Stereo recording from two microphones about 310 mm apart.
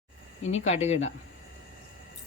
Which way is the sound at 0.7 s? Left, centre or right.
Left.